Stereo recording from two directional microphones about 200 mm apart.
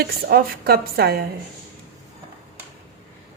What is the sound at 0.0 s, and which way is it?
Speech, 50° right (ahead or behind).